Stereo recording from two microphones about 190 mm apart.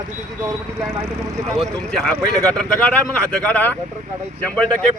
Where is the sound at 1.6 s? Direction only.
5° left (ahead or behind).